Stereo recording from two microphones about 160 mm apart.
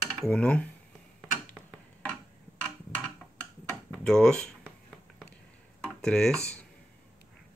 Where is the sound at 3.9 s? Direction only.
5° left (ahead or behind).